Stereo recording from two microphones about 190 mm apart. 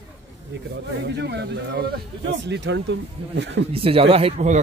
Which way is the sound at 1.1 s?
60° right (ahead or behind).